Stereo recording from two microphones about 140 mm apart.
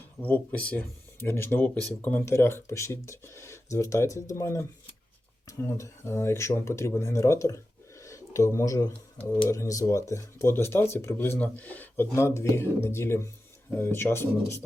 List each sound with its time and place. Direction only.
0.2 s speech: 10° left (ahead or behind)